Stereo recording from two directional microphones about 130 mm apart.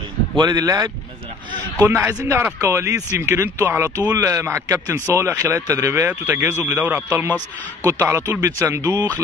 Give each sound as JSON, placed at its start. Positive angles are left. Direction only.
{"t": 0.4, "sound": "speech", "side_deg": -30}
{"t": 1.8, "sound": "a man's voice", "side_deg": -15}